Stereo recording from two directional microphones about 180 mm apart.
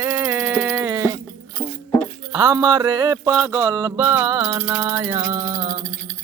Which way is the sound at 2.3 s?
20° right (ahead or behind).